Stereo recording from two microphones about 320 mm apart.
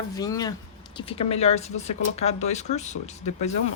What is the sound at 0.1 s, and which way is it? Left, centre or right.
Speech, centre.